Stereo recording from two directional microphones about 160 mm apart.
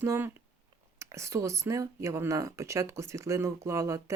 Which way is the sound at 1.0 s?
20° right (ahead or behind).